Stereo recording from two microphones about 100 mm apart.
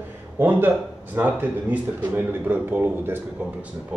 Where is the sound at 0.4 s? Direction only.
20° right (ahead or behind).